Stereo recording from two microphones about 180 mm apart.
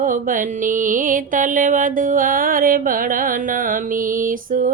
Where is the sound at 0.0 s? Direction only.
45° right (ahead or behind).